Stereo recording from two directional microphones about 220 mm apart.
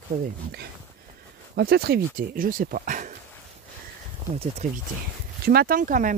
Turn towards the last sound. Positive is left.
turn(degrees=-35)  # may be behind; listen again after turning